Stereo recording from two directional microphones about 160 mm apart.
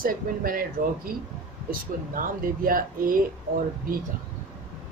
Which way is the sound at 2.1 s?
60° right (ahead or behind).